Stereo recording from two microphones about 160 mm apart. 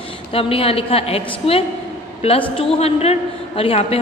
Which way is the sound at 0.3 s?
35° left (ahead or behind).